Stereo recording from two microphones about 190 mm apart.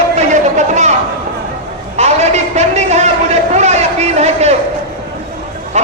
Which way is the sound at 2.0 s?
35° right (ahead or behind).